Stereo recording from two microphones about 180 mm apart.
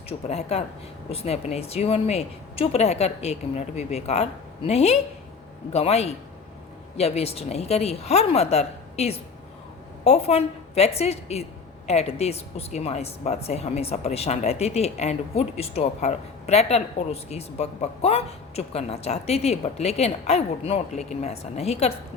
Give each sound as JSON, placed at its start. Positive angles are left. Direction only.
{"t": 0.1, "sound": "a woman's voice", "side_deg": 35}